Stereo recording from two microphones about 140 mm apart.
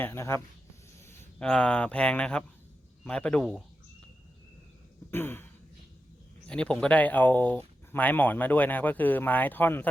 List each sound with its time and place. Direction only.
0.0 s speech: 15° left (ahead or behind)
1.4 s speech: 5° left (ahead or behind)
5.1 s speech: 15° left (ahead or behind)
6.5 s speech: 5° left (ahead or behind)